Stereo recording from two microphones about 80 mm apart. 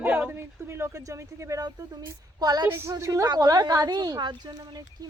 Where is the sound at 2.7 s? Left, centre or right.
Right.